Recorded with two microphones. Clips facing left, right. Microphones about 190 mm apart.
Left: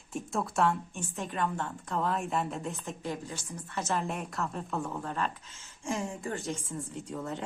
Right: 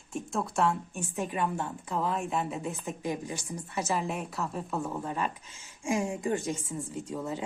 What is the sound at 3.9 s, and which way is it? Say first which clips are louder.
A woman's voice: even; centre (ahead or behind).